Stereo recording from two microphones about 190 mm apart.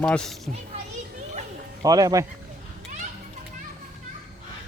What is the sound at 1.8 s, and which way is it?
Speech, 20° right (ahead or behind).